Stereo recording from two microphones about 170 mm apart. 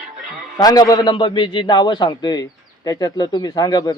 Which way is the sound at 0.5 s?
20° left (ahead or behind).